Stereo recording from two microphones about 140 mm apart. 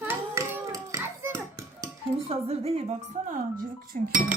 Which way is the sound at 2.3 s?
45° right (ahead or behind).